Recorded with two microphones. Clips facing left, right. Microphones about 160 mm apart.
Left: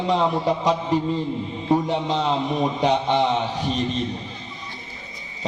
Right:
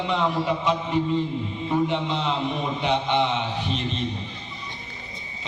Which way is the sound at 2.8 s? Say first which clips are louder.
Left 2 dB; 40° left (ahead or behind).